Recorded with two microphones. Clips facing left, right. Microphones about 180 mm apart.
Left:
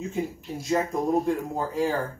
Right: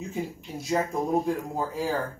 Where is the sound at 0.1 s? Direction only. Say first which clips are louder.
Left 3 dB; centre (ahead or behind).